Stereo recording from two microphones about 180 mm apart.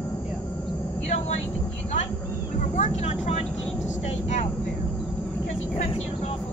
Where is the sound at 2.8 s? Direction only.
35° left (ahead or behind).